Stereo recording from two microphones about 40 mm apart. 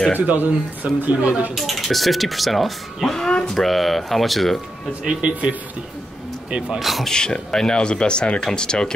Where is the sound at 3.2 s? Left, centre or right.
Centre.